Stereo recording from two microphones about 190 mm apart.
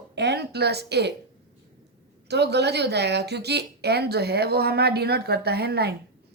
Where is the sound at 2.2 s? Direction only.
60° right (ahead or behind).